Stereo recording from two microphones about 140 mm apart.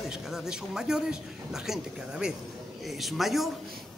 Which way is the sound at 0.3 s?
5° right (ahead or behind).